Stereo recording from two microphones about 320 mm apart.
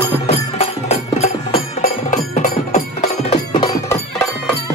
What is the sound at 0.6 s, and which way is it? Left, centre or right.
Music, centre.